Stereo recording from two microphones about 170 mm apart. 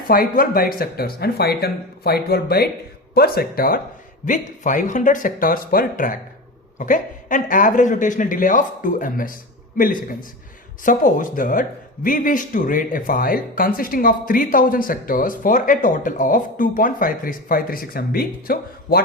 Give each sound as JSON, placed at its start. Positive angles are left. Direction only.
{"t": 0.1, "sound": "speech", "side_deg": 60}
{"t": 4.3, "sound": "speech", "side_deg": 50}